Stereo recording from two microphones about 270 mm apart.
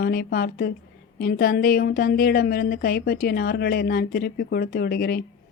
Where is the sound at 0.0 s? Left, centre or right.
Left.